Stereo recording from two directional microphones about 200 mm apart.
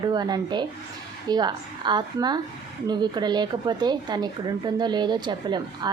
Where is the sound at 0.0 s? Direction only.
20° right (ahead or behind).